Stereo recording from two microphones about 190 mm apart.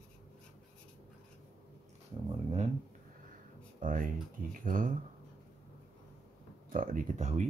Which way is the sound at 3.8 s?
45° right (ahead or behind).